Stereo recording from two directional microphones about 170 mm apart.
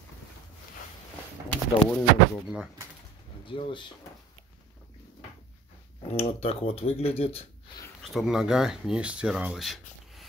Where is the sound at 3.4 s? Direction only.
30° left (ahead or behind).